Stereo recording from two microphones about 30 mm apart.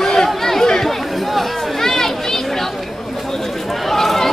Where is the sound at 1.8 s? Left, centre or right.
Centre.